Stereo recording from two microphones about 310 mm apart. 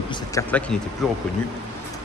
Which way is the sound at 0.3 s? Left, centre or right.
Centre.